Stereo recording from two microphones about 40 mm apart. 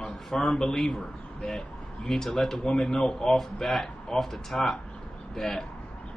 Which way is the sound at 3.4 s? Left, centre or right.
Centre.